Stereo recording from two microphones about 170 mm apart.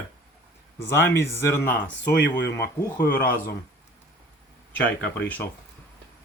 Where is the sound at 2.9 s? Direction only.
55° left (ahead or behind).